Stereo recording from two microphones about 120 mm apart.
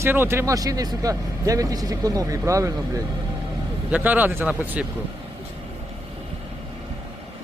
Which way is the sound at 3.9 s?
15° right (ahead or behind).